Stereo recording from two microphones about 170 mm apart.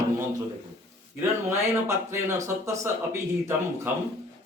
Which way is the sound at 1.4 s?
15° right (ahead or behind).